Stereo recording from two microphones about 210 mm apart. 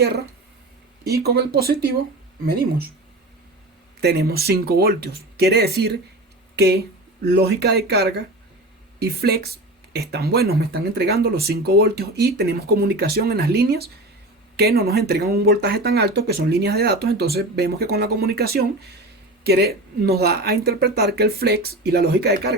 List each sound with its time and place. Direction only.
0.0 s speech: 50° right (ahead or behind)
4.0 s speech: 50° right (ahead or behind)